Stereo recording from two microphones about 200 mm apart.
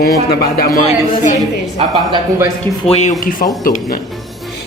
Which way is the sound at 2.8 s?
35° left (ahead or behind).